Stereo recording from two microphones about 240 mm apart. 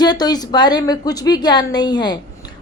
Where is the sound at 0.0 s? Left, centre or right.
Centre.